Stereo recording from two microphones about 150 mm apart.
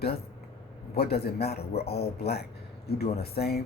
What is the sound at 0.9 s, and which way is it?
Speech, 90° left.